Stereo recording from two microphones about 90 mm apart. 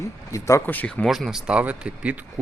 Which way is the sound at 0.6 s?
20° left (ahead or behind).